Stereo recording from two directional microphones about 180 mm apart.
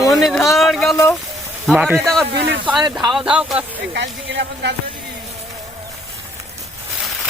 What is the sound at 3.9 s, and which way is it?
Speech, 70° right (ahead or behind).